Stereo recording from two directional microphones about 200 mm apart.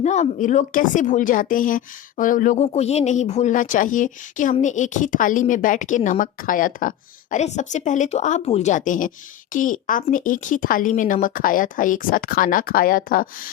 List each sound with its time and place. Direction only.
0.0 s a woman's voice: 35° left (ahead or behind)